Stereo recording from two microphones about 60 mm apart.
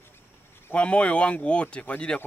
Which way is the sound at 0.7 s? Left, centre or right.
Centre.